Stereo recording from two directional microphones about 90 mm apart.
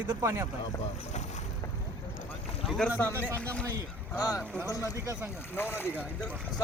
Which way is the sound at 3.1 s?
25° right (ahead or behind).